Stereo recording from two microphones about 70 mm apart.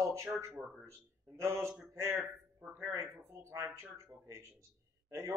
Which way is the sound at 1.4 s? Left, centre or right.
Right.